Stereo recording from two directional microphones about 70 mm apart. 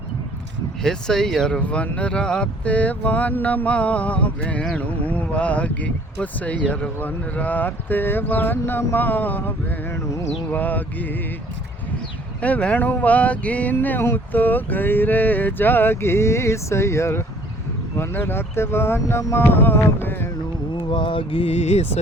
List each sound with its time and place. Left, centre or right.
0.8 s speech: centre
1.6 s speech: centre
10.0 s a sound: left
10.5 s speech: left
12.4 s speech: centre
13.7 s a sound: left